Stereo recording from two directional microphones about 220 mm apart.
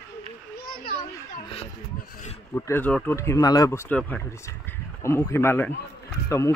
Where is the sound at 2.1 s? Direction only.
30° left (ahead or behind).